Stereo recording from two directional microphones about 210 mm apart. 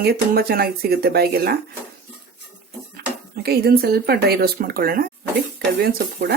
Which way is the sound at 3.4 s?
45° right (ahead or behind).